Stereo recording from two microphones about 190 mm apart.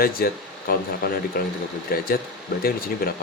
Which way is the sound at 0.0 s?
50° left (ahead or behind).